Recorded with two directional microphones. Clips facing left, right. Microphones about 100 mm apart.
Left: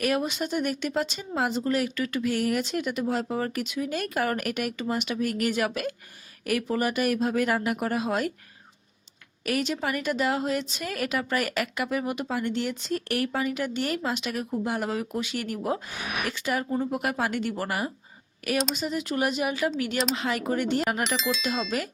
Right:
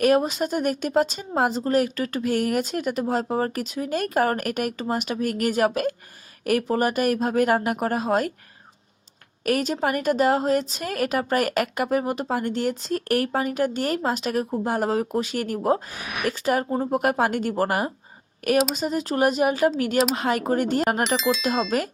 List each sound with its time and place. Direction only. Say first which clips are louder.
0.0 s a woman's voice: right 7 dB; 40° right (ahead or behind)
9.4 s a woman's voice: right 5 dB; 45° right (ahead or behind)
21.2 s speech: right 5 dB; centre (ahead or behind)
21.4 s a woman's voice: right 5 dB; 40° right (ahead or behind)